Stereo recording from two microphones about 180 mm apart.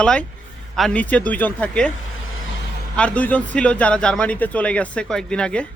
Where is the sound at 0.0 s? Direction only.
5° left (ahead or behind).